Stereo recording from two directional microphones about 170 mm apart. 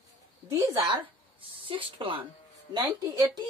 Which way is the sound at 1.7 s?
30° right (ahead or behind).